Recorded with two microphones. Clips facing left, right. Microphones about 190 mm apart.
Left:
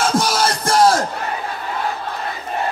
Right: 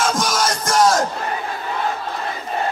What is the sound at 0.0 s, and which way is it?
Music, 35° left (ahead or behind).